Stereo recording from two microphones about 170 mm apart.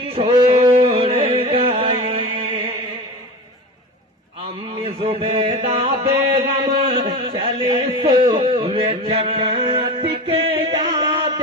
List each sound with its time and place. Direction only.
0.0 s music: 30° right (ahead or behind)
4.8 s music: 30° right (ahead or behind)
7.3 s a sound: 30° right (ahead or behind)